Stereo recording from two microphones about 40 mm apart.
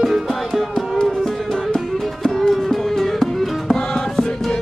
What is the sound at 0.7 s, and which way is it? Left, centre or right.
Music, centre.